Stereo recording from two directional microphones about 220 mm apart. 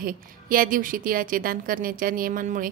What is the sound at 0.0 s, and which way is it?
A woman's voice, 40° right (ahead or behind).